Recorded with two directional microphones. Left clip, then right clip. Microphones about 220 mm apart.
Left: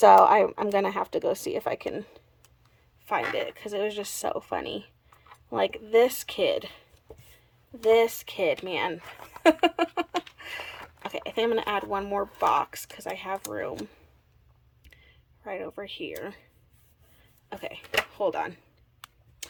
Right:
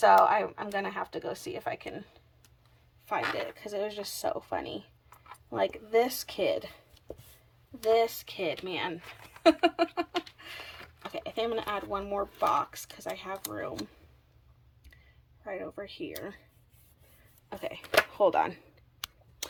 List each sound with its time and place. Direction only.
0.3 s speech: 25° left (ahead or behind)
3.1 s speech: 15° left (ahead or behind)
7.8 s speech: 15° left (ahead or behind)
15.4 s speech: 10° left (ahead or behind)
17.5 s speech: centre (ahead or behind)